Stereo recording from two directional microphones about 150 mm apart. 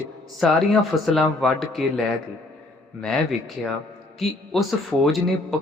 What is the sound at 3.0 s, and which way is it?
Speech, centre (ahead or behind).